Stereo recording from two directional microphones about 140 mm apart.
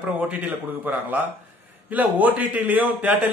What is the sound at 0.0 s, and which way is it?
A man's voice, 10° right (ahead or behind).